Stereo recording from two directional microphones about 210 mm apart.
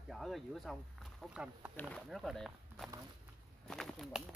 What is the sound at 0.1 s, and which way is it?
Speech, centre (ahead or behind).